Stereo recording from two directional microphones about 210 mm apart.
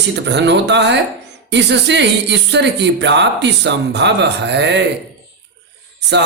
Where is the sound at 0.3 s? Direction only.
55° right (ahead or behind).